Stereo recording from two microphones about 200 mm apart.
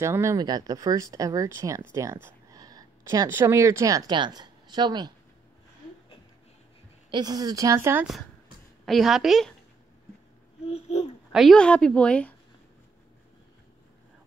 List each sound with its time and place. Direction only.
0.0 s speech: 15° right (ahead or behind)
7.1 s a woman's voice: 20° right (ahead or behind); by 9.5 s centre (ahead or behind)
10.7 s babbling: 35° left (ahead or behind)
11.3 s a woman's voice: 5° left (ahead or behind)